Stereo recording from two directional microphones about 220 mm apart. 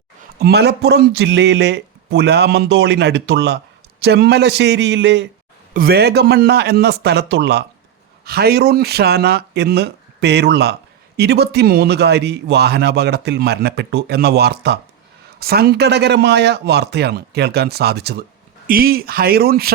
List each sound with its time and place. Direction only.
0.3 s a man's voice: 45° right (ahead or behind)